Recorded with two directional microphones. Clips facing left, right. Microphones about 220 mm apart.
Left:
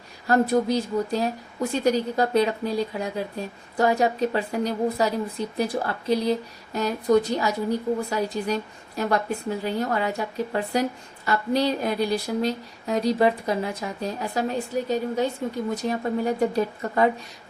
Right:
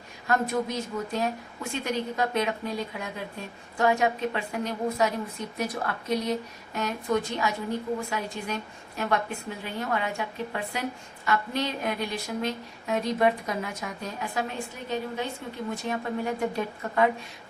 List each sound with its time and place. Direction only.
0.3 s speech: 35° left (ahead or behind)